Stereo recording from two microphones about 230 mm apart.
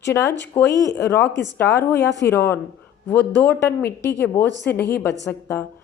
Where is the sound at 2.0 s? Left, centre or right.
Left.